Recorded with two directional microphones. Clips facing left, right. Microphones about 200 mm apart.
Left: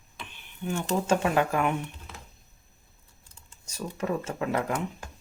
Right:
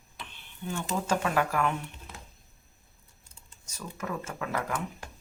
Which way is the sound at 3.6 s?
30° left (ahead or behind).